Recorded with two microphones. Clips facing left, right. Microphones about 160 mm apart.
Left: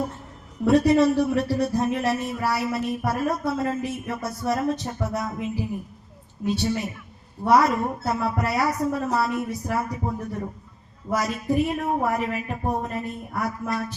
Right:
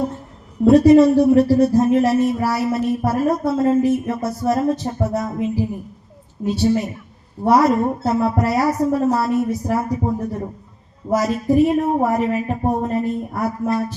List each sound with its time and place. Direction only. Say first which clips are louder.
0.7 s speech: right 7 dB; 35° right (ahead or behind)
9.3 s speech: right 7 dB; 40° right (ahead or behind)